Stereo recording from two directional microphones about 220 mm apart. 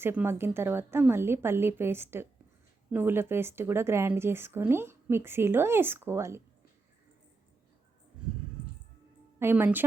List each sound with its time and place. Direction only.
0.0 s speech: 10° right (ahead or behind)
8.2 s a sound: 5° right (ahead or behind)
9.4 s speech: 10° right (ahead or behind)